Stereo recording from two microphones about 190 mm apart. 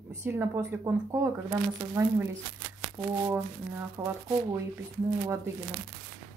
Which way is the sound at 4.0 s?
20° right (ahead or behind).